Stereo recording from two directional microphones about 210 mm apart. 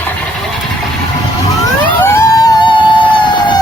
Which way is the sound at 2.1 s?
15° left (ahead or behind).